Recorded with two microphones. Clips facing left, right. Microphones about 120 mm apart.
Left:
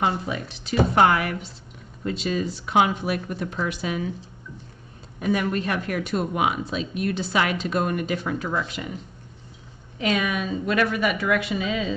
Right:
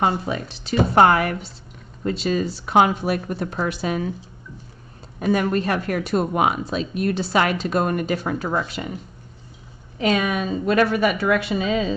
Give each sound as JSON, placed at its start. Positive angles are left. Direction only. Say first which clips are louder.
{"t": 0.0, "sound": "speech", "louder": "right 3 dB", "side_deg": -35}
{"t": 5.2, "sound": "speech", "louder": "right 4 dB", "side_deg": -40}
{"t": 9.9, "sound": "speech", "louder": "right 3 dB", "side_deg": -40}